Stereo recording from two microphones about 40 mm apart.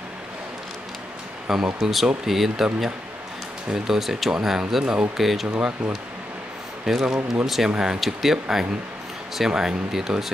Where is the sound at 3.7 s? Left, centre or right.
Centre.